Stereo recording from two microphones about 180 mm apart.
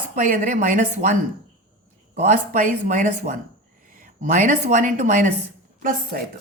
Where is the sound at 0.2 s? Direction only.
45° right (ahead or behind).